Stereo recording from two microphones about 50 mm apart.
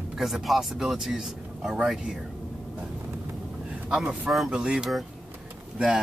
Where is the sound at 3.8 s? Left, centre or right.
Centre.